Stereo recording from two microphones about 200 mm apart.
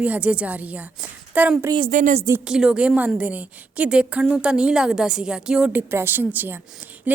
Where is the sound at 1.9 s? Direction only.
40° right (ahead or behind).